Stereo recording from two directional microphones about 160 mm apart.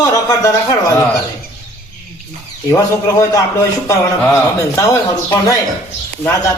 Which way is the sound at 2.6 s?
20° left (ahead or behind).